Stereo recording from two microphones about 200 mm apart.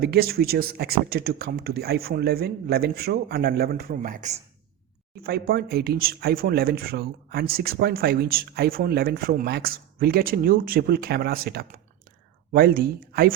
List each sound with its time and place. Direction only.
0.0 s speech: 50° right (ahead or behind)